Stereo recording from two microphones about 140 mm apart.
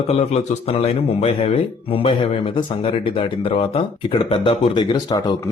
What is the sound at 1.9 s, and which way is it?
Speech, 40° left (ahead or behind).